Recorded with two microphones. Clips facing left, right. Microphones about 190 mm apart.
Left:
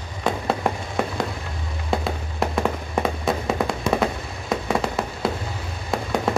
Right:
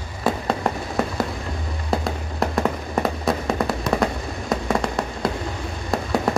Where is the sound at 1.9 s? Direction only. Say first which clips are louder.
Right 1 dB; centre (ahead or behind).